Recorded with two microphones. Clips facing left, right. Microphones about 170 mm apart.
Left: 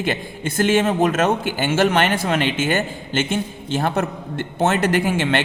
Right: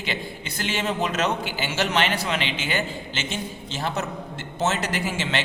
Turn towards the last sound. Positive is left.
turn(degrees=55)  # may be behind; listen again after turning